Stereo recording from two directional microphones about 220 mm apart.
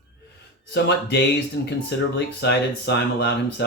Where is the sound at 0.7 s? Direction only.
50° left (ahead or behind).